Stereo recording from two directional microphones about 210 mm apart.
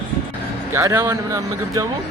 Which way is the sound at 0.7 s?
10° right (ahead or behind).